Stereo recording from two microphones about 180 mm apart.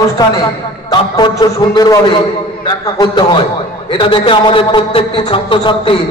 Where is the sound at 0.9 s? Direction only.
20° left (ahead or behind).